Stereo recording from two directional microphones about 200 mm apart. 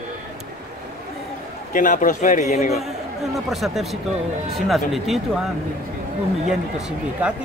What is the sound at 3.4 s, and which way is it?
A man's voice, centre (ahead or behind).